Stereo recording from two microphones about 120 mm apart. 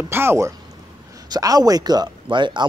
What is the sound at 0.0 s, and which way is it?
Speech, 20° right (ahead or behind).